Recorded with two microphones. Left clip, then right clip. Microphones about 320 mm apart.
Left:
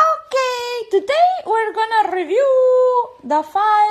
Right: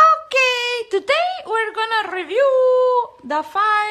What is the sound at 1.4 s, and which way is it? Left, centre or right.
Speech, centre.